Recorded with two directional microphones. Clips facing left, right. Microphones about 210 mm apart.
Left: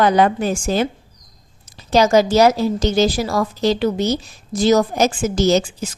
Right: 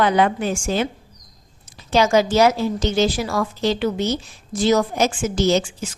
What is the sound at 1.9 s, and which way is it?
A woman's voice, 40° left (ahead or behind).